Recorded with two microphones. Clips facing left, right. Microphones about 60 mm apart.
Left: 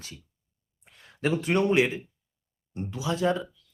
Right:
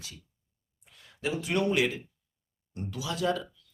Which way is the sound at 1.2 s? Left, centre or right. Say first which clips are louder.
Left 4 dB; left.